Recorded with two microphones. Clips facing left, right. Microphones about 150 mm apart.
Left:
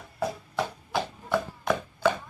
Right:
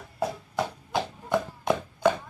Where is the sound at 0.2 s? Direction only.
15° right (ahead or behind).